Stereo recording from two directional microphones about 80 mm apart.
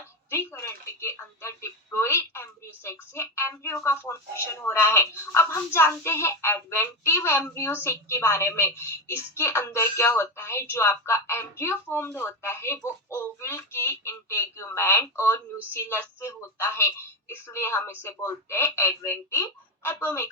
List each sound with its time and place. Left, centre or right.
0.3 s speech: left